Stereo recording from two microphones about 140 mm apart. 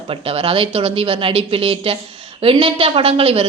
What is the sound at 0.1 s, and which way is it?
A woman's voice, 45° right (ahead or behind).